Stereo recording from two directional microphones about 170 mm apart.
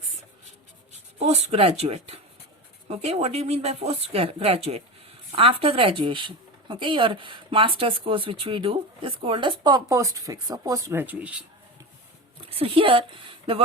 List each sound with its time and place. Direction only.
1.2 s speech: 40° right (ahead or behind); by 11.3 s 10° right (ahead or behind)
12.5 s speech: 30° right (ahead or behind)